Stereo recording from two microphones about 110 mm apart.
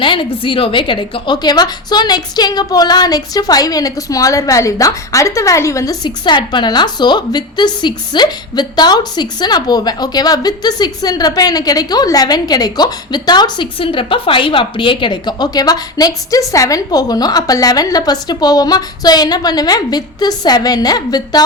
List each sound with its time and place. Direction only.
0.0 s a woman's voice: 50° left (ahead or behind)